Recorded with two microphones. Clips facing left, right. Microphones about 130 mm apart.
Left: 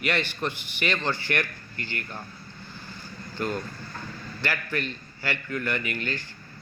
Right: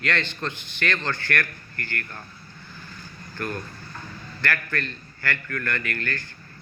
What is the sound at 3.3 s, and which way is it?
A man's voice, 20° left (ahead or behind).